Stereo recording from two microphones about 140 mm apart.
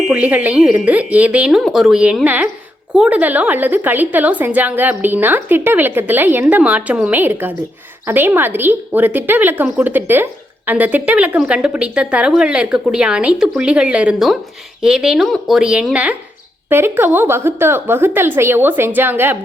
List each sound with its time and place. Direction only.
0.1 s a woman's voice: 10° right (ahead or behind)